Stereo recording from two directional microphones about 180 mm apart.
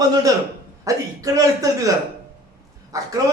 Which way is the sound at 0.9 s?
20° right (ahead or behind).